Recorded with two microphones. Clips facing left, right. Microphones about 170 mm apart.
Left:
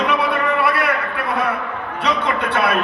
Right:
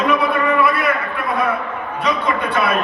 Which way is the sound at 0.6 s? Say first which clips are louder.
Right 2 dB; 65° left (ahead or behind).